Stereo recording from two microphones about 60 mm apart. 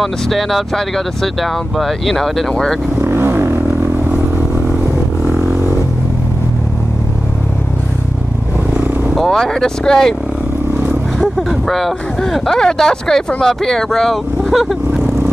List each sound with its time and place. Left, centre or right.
0.0 s speech: centre
3.0 s speech: right
9.1 s speech: centre
11.1 s speech: centre